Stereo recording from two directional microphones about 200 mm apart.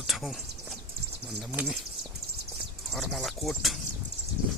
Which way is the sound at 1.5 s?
5° right (ahead or behind).